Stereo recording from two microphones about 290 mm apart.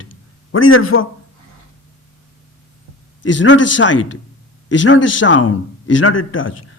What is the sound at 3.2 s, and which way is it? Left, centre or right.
A man's voice, left.